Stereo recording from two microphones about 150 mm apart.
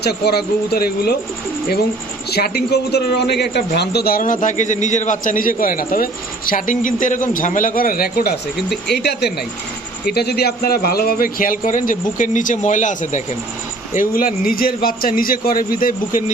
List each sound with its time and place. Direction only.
0.0 s speech: 90° left
2.3 s a man's voice: 90° left; by 16.2 s 70° left (ahead or behind)